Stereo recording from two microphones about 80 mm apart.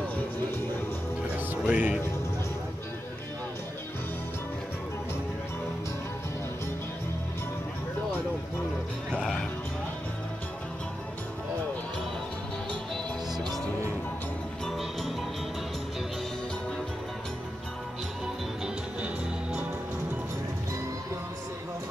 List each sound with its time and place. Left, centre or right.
1.6 s speech: centre
9.1 s music: centre
14.8 s music: centre